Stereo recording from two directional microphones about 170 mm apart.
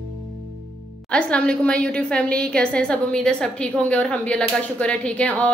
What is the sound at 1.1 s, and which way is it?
A woman's voice, 5° left (ahead or behind).